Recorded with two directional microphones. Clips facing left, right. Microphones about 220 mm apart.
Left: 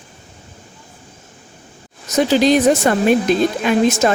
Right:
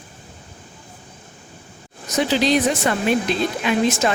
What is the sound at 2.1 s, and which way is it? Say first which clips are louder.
Speech: left 5 dB; 45° left (ahead or behind).